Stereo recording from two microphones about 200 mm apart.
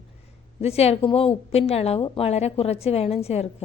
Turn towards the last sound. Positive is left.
turn(degrees=30)  # may be behind; listen again after turning